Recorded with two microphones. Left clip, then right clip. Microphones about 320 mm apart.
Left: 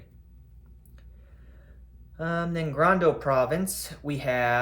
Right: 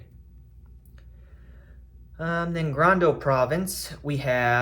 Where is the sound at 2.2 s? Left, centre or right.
Centre.